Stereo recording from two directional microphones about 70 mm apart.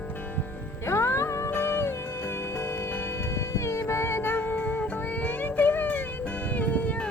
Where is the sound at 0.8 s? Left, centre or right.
Left.